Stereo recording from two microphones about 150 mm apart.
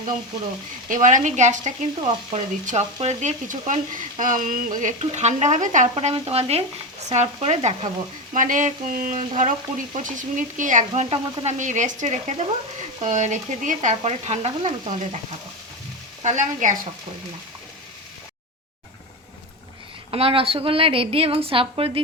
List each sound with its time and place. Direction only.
0.9 s frying: 60° right (ahead or behind)
5.9 s a woman's voice: 40° right (ahead or behind)
7.1 s frying: 45° right (ahead or behind)
8.3 s frying: 60° right (ahead or behind)
16.2 s frying: 55° right (ahead or behind)
20.1 s a woman's voice: 40° right (ahead or behind)